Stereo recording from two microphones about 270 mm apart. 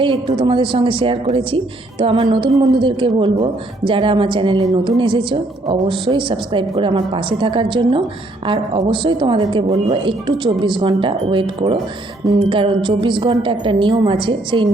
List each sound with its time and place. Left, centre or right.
0.0 s a woman's voice: centre